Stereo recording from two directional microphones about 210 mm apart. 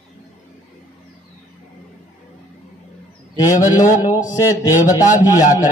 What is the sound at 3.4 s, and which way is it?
Speech, 15° left (ahead or behind).